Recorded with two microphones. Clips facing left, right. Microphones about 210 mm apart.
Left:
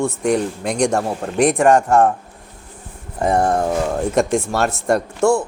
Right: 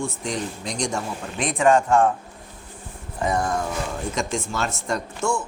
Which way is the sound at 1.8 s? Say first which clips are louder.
Left 4 dB; 40° left (ahead or behind).